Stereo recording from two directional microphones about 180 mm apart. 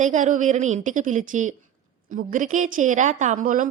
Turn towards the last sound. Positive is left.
turn(degrees=-45)  # may be behind; listen again after turning